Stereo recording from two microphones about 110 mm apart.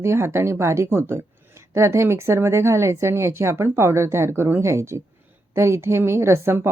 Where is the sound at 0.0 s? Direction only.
25° right (ahead or behind).